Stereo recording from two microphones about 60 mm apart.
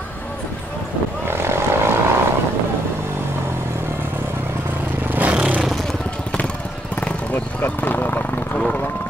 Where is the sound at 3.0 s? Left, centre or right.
Right.